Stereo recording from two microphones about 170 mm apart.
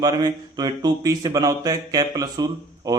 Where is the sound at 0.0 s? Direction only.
25° right (ahead or behind).